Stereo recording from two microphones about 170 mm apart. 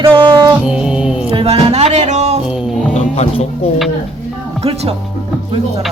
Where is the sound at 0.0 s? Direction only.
30° right (ahead or behind).